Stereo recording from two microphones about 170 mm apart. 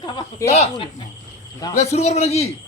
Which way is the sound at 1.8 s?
40° left (ahead or behind).